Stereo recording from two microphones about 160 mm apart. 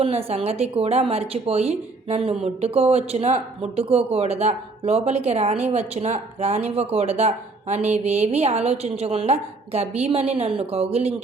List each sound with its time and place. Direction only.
0.0 s a woman's voice: 40° right (ahead or behind)